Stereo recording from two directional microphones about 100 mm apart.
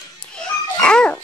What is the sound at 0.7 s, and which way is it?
Speech, 10° left (ahead or behind).